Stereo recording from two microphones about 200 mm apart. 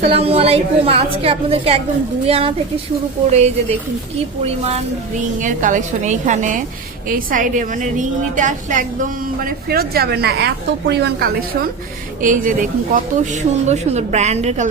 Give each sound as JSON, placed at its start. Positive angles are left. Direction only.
{"t": 0.0, "sound": "a woman's voice", "side_deg": -30}
{"t": 5.4, "sound": "a woman's voice", "side_deg": -40}